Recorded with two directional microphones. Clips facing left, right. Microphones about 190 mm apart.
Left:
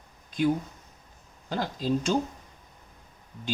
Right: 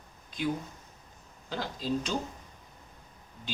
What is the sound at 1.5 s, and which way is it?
Speech, 45° left (ahead or behind).